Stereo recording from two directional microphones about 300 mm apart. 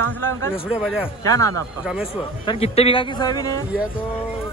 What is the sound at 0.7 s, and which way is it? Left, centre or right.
Speech, centre.